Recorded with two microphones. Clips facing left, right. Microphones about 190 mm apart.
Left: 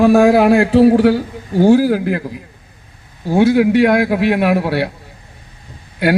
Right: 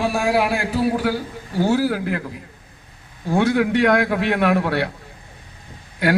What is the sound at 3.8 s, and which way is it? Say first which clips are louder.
Speech: left 4 dB; 30° left (ahead or behind).